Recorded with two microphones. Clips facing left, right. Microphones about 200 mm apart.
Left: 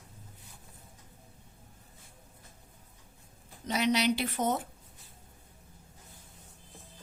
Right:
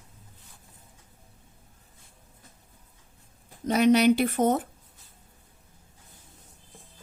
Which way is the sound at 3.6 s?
50° right (ahead or behind).